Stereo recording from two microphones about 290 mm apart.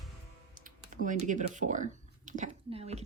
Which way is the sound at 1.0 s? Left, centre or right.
Right.